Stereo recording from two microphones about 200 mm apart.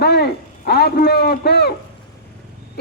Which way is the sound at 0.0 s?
55° left (ahead or behind).